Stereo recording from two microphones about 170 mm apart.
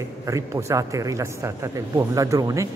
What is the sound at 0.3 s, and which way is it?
A man's voice, 20° right (ahead or behind).